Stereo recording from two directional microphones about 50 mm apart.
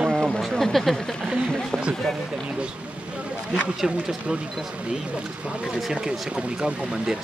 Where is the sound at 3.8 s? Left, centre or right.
Centre.